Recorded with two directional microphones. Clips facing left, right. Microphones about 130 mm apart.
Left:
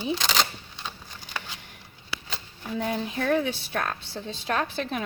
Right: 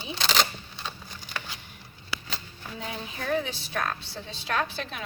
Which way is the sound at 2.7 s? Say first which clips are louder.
Left 9 dB; 65° left (ahead or behind).